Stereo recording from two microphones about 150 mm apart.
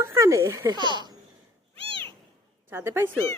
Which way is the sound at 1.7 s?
40° right (ahead or behind).